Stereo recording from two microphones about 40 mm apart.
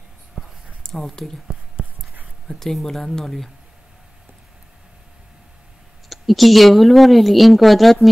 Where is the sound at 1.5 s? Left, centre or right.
Centre.